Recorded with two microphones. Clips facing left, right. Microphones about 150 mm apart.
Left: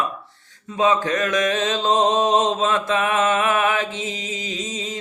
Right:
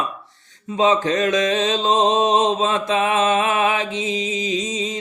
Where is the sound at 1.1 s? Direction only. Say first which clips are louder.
Right 2 dB; 20° right (ahead or behind).